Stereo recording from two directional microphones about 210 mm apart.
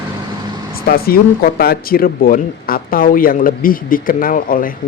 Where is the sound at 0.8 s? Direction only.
45° left (ahead or behind).